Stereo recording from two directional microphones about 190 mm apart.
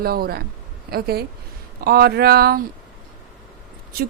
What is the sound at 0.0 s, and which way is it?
A woman's voice, 55° right (ahead or behind).